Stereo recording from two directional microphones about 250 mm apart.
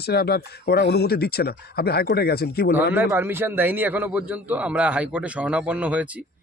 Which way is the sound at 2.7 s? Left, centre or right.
Centre.